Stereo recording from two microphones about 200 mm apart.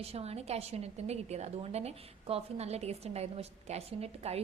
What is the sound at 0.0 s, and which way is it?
A woman's voice, 30° right (ahead or behind).